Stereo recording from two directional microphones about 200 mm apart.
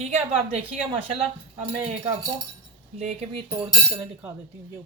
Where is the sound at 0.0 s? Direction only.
35° right (ahead or behind).